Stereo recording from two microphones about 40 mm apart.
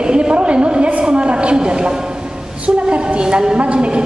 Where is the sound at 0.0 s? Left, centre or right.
Right.